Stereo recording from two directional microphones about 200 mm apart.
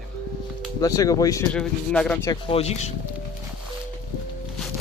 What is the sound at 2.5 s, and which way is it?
Speech, 30° left (ahead or behind).